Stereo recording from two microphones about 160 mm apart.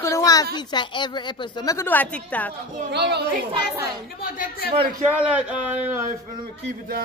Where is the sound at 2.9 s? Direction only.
90° right.